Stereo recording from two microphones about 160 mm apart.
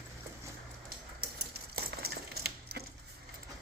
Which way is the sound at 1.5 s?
80° right.